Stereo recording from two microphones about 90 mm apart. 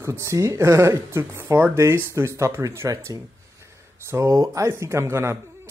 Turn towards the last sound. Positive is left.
turn(degrees=-30)  # may be behind; listen again after turning